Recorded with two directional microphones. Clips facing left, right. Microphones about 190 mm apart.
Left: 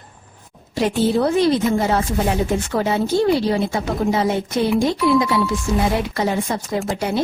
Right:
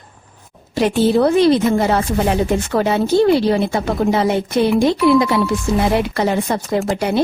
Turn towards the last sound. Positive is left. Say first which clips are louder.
# right 4 dB
turn(degrees=-65)  # may be behind; listen again after turning